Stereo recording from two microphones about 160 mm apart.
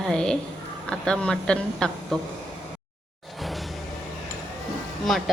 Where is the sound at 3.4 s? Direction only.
Centre (ahead or behind).